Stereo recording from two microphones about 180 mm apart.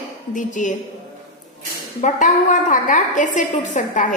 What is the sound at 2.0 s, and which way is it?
A woman's voice, 45° left (ahead or behind).